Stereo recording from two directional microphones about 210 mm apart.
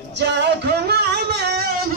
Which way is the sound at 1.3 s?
50° right (ahead or behind).